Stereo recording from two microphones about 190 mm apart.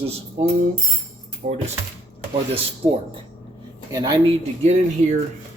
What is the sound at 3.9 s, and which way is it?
Speech, 20° right (ahead or behind).